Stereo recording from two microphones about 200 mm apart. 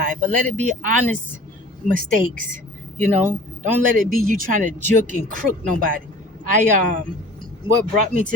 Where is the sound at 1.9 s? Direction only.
40° right (ahead or behind).